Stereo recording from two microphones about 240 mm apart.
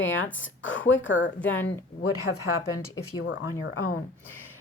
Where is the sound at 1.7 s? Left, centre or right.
Left.